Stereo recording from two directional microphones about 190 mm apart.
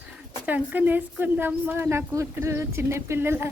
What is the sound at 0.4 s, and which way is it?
A woman's voice, 10° right (ahead or behind).